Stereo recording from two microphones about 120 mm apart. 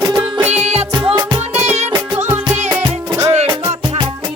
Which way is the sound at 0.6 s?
60° right (ahead or behind).